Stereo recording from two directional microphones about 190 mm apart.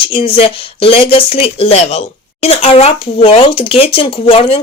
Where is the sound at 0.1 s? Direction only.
30° left (ahead or behind).